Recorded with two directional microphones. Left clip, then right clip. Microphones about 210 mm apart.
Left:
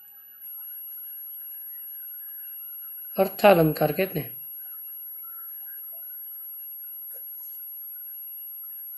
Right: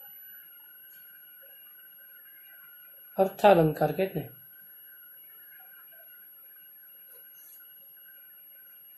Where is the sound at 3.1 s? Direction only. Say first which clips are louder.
Left 3 dB; 35° left (ahead or behind).